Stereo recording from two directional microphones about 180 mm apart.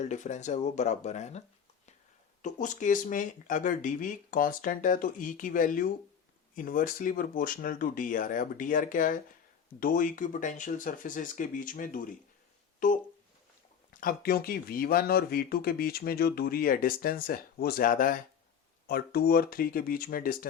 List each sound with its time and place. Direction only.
0.0 s speech: 40° left (ahead or behind)
13.9 s speech: 55° left (ahead or behind)